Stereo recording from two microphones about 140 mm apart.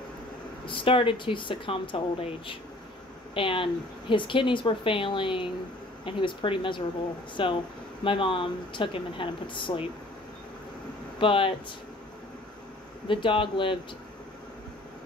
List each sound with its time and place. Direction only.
0.7 s speech: 40° left (ahead or behind)
11.1 s speech: 40° left (ahead or behind)
13.1 s speech: 35° left (ahead or behind)